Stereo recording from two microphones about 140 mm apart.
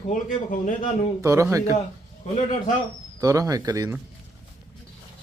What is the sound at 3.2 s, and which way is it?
Speech, 25° right (ahead or behind).